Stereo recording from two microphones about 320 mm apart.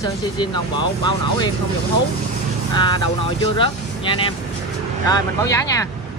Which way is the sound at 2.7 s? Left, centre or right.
Centre.